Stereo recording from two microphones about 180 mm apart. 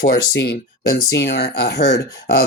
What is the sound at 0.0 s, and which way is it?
Speech, 70° left (ahead or behind).